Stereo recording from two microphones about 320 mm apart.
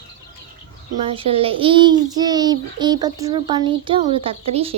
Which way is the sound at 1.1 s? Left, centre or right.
Centre.